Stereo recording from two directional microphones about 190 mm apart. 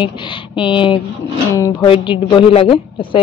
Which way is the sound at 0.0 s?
25° left (ahead or behind).